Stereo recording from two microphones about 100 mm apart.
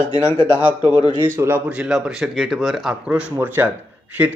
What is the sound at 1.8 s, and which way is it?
Speech, 5° right (ahead or behind).